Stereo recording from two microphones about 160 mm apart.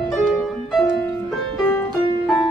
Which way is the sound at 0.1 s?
5° left (ahead or behind).